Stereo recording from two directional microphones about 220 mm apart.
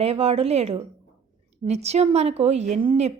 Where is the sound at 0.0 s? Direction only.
25° right (ahead or behind).